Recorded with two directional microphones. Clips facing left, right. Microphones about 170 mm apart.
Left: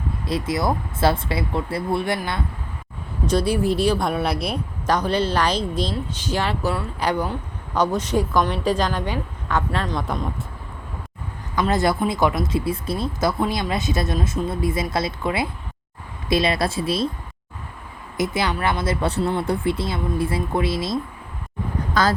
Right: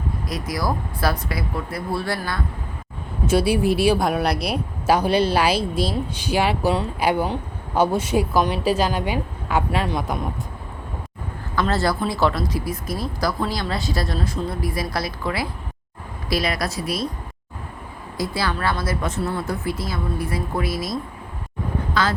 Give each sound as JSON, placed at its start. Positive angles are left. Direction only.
{"t": 0.3, "sound": "speech", "side_deg": 25}
{"t": 3.2, "sound": "speech", "side_deg": -10}
{"t": 4.0, "sound": "speech", "side_deg": 0}
{"t": 7.2, "sound": "a sound", "side_deg": -25}
{"t": 7.9, "sound": "speech", "side_deg": -10}
{"t": 11.5, "sound": "speech", "side_deg": 15}
{"t": 18.2, "sound": "speech", "side_deg": 20}